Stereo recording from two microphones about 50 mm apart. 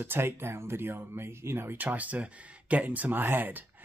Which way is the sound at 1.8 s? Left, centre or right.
Right.